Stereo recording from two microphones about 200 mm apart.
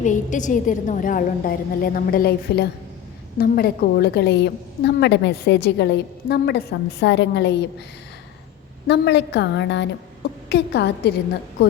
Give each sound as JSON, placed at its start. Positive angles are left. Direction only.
{"t": 0.0, "sound": "a woman's voice", "side_deg": 40}
{"t": 8.9, "sound": "a woman's voice", "side_deg": 60}